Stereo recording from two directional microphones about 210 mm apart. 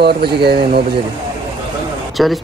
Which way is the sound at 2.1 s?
Centre (ahead or behind).